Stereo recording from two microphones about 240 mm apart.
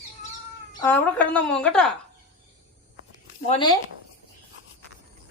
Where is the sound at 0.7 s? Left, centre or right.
Centre.